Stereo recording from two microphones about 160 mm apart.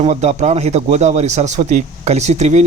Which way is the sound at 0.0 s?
45° right (ahead or behind).